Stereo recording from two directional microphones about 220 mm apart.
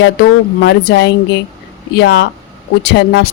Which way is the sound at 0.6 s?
50° left (ahead or behind).